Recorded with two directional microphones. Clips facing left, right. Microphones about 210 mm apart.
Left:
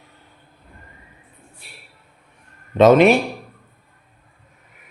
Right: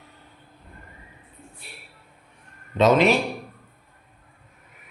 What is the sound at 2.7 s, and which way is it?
Speech, 55° left (ahead or behind).